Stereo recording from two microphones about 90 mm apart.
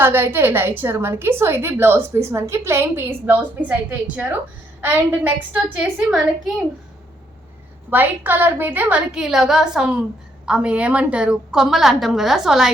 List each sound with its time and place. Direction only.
0.0 s a woman's voice: 25° right (ahead or behind)
5.7 s a woman's voice: 10° right (ahead or behind)
7.9 s a woman's voice: 20° right (ahead or behind)